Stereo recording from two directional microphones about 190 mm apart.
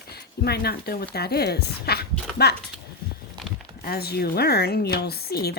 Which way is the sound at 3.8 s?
55° left (ahead or behind).